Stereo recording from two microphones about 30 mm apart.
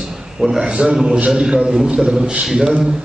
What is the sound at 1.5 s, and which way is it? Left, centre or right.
A man's voice, right.